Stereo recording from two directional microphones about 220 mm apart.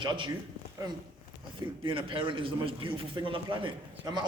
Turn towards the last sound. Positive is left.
turn(degrees=-20)  # may be behind; listen again after turning